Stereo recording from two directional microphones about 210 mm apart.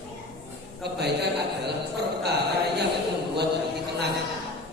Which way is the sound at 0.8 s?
50° right (ahead or behind).